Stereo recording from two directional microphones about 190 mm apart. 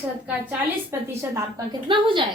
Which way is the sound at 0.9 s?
15° right (ahead or behind).